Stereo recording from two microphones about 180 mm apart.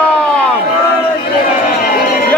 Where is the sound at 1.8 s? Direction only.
60° left (ahead or behind).